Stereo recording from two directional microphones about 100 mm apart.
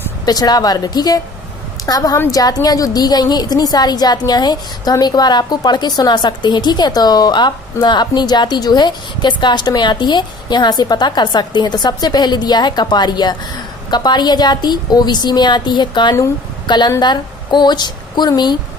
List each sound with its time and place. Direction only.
0.3 s a woman's voice: 40° left (ahead or behind)